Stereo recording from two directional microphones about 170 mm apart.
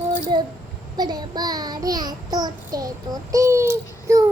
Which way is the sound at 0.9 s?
25° right (ahead or behind).